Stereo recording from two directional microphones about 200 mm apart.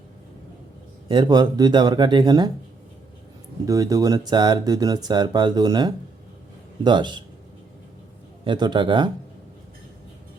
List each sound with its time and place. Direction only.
1.0 s speech: 25° right (ahead or behind)
3.7 s speech: 15° right (ahead or behind)
8.4 s speech: 20° right (ahead or behind)